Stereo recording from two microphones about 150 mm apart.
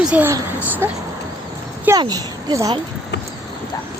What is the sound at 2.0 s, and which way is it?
Speech, 25° right (ahead or behind).